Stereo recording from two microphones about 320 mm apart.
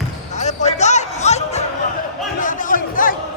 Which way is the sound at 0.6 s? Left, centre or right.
Left.